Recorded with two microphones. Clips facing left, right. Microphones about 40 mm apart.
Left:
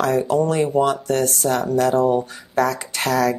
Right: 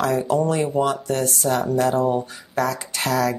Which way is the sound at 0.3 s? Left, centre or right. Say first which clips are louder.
Left 2 dB; left.